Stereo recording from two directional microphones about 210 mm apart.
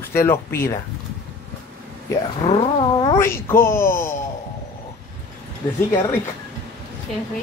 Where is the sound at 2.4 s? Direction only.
25° left (ahead or behind).